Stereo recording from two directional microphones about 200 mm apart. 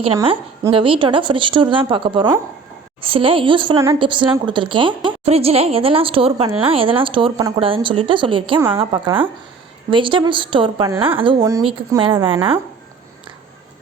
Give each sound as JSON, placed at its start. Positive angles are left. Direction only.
{"t": 0.7, "sound": "a woman's voice", "side_deg": -25}
{"t": 8.5, "sound": "speech", "side_deg": -10}
{"t": 8.8, "sound": "a woman's voice", "side_deg": -25}